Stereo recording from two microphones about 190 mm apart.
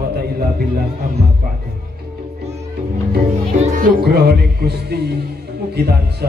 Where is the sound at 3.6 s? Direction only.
45° right (ahead or behind).